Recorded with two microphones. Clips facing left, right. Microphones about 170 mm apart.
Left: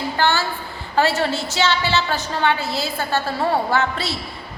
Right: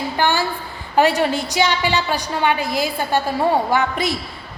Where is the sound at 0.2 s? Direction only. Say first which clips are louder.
Right 1 dB; 15° right (ahead or behind).